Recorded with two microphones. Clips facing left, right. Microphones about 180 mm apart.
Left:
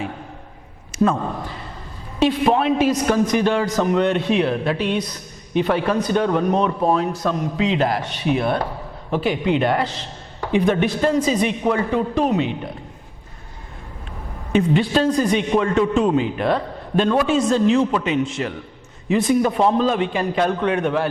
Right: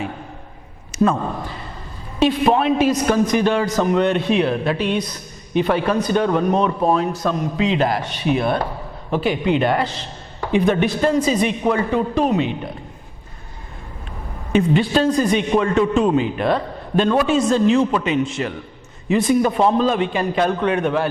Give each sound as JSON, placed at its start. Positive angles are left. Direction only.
{"t": 1.1, "sound": "a man's voice", "side_deg": -30}
{"t": 2.1, "sound": "a man's voice", "side_deg": -15}
{"t": 14.5, "sound": "a man's voice", "side_deg": -15}